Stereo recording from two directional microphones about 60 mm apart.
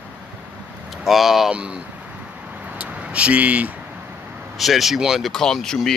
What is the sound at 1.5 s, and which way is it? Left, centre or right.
Speech, centre.